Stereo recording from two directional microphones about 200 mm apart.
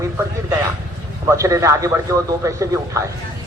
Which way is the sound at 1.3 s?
15° right (ahead or behind).